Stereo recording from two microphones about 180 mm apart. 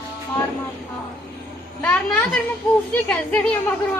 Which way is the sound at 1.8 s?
10° left (ahead or behind).